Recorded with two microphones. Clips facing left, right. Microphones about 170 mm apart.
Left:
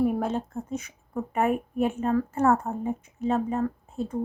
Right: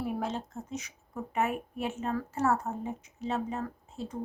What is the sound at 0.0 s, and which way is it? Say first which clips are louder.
A woman's voice: left 8 dB; 55° left (ahead or behind).